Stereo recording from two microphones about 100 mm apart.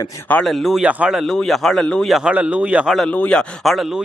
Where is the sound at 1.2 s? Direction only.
Centre (ahead or behind).